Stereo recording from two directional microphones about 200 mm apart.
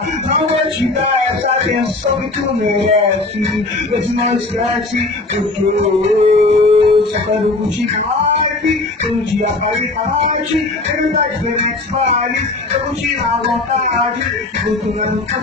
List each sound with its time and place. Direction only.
5.8 s music: 30° right (ahead or behind)